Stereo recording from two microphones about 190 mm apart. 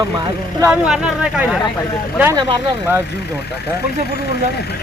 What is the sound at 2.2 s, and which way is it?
Speech, 15° right (ahead or behind).